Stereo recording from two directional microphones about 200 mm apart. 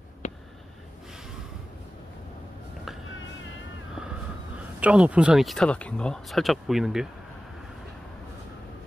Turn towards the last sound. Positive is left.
turn(degrees=0)  # may be behind; listen again after turning